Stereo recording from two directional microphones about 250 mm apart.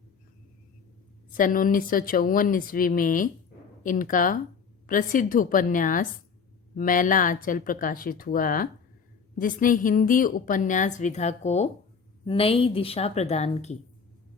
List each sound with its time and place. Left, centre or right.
1.4 s a woman's voice: left